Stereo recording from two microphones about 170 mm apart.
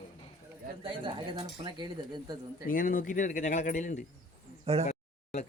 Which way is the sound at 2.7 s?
55° left (ahead or behind).